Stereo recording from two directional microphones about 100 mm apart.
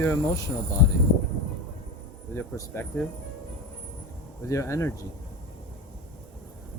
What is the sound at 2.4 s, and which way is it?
Speech, 30° left (ahead or behind).